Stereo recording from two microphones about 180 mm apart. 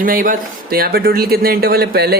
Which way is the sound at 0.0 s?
50° right (ahead or behind).